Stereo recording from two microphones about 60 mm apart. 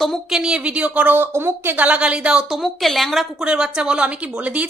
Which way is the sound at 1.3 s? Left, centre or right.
Right.